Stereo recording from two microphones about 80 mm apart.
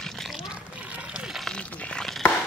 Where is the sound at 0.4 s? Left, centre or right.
Centre.